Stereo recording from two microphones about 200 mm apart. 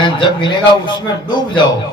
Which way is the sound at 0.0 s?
20° left (ahead or behind).